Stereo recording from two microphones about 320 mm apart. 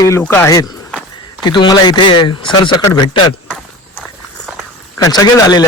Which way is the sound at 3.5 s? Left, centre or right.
Centre.